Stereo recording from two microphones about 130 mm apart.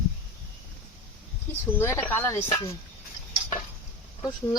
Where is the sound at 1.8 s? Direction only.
20° left (ahead or behind).